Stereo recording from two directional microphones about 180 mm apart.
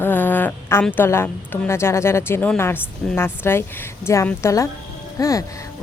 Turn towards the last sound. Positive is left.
turn(degrees=20)  # may be behind; listen again after turning